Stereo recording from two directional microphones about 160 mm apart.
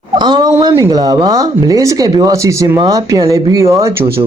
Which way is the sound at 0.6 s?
20° right (ahead or behind).